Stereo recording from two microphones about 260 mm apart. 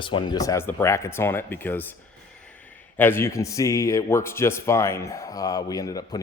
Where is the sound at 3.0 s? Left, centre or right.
Centre.